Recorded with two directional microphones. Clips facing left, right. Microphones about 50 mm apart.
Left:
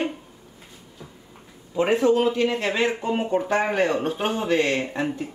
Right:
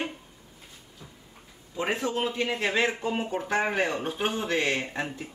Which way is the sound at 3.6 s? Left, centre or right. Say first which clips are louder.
Left 5 dB; centre.